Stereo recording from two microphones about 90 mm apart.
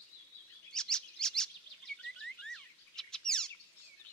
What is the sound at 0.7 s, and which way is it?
Chirp, 5° left (ahead or behind).